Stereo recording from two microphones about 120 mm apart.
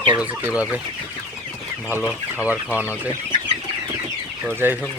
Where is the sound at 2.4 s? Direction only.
15° right (ahead or behind).